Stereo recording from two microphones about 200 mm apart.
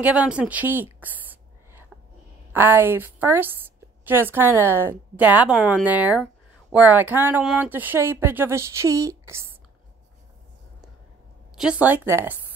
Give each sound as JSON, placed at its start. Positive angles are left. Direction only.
{"t": 0.0, "sound": "speech", "side_deg": -5}
{"t": 1.0, "sound": "a sound", "side_deg": -10}
{"t": 2.5, "sound": "speech", "side_deg": -10}
{"t": 11.5, "sound": "speech", "side_deg": -5}